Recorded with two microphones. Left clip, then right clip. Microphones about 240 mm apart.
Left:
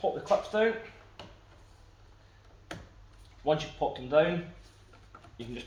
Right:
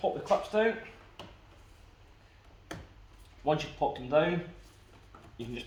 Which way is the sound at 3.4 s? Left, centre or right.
Centre.